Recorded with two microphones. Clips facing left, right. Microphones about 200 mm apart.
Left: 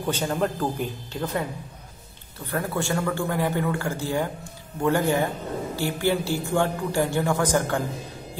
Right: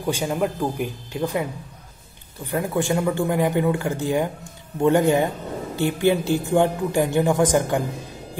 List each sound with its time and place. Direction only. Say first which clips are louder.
0.0 s a man's voice: right 2 dB; 10° right (ahead or behind)
2.4 s a man's voice: right 4 dB; 15° right (ahead or behind)